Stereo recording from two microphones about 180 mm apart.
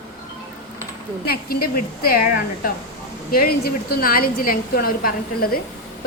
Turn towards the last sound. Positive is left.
turn(degrees=55)  # may be behind; listen again after turning